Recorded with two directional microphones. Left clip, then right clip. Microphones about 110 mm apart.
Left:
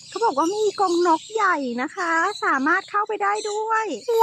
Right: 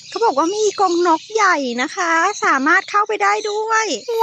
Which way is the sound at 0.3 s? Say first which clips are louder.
Right 4 dB; 20° right (ahead or behind).